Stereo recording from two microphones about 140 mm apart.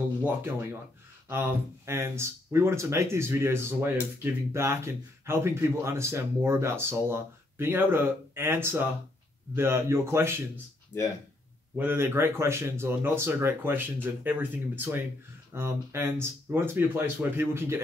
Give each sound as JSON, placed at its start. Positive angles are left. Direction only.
{"t": 0.2, "sound": "speech", "side_deg": -15}
{"t": 1.9, "sound": "speech", "side_deg": -20}
{"t": 11.7, "sound": "speech", "side_deg": -15}